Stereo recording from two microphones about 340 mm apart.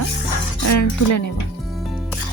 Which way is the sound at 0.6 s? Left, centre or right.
Left.